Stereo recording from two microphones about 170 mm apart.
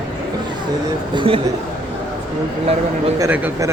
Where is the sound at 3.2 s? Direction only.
15° right (ahead or behind).